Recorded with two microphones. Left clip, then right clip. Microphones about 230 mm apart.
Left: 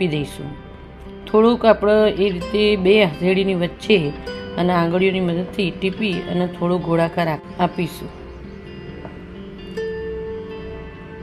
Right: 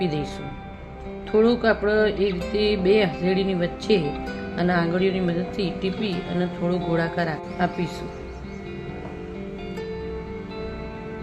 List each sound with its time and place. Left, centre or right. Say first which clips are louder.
0.0 s speech: left 4 dB; centre
1.3 s speech: left 5 dB; centre